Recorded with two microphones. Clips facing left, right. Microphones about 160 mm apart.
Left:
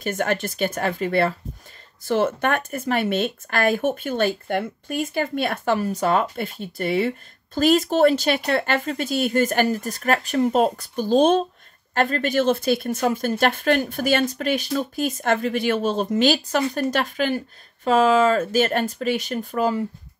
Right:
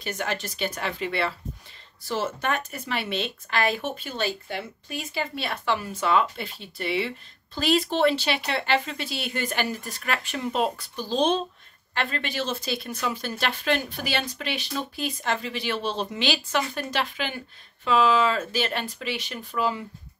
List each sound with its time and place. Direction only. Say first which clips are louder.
0.0 s speech: left 7 dB; 50° left (ahead or behind)
2.0 s speech: left 7 dB; 55° left (ahead or behind)